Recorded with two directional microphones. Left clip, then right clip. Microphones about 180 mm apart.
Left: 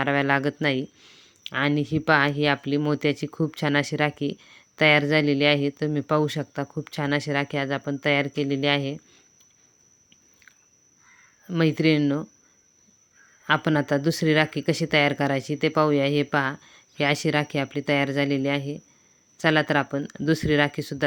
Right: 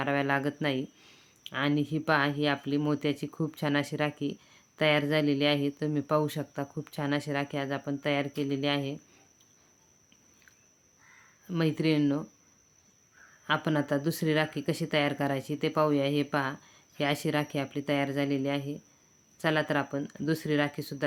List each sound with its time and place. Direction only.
0.0 s speech: 25° left (ahead or behind)
1.5 s speech: 25° left (ahead or behind)
11.4 s speech: 25° left (ahead or behind)
13.4 s speech: 30° left (ahead or behind)